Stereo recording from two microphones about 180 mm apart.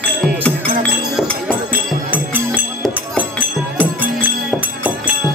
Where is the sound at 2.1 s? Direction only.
10° right (ahead or behind).